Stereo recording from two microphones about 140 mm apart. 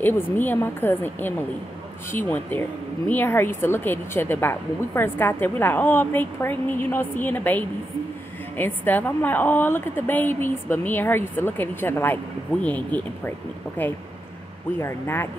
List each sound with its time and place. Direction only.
0.0 s a woman's voice: 15° left (ahead or behind)
14.8 s a woman's voice: 15° left (ahead or behind)